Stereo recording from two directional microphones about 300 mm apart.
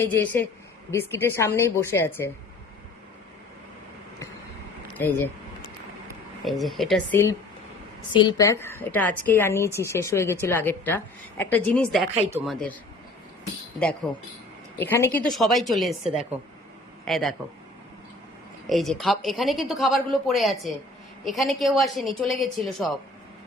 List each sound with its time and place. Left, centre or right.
0.0 s a woman's voice: centre
4.9 s a woman's voice: centre
6.4 s a woman's voice: centre
13.7 s a woman's voice: centre
18.7 s a woman's voice: centre